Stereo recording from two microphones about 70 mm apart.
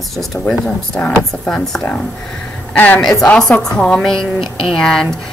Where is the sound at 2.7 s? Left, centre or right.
Left.